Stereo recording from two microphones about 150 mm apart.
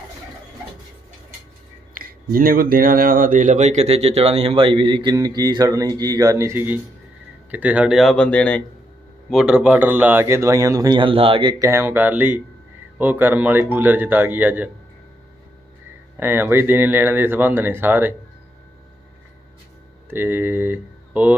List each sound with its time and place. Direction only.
2.0 s speech: 75° right (ahead or behind); by 8.6 s 10° left (ahead or behind)
9.3 s speech: 5° right (ahead or behind); by 11.5 s 35° right (ahead or behind)
11.6 s speech: 15° right (ahead or behind)
16.1 s speech: 15° right (ahead or behind)
20.1 s speech: 15° right (ahead or behind)